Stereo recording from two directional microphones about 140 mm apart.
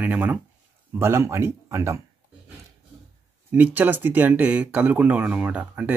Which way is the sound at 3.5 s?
10° right (ahead or behind).